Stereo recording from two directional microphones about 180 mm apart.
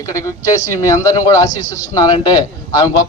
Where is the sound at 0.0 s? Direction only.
15° left (ahead or behind).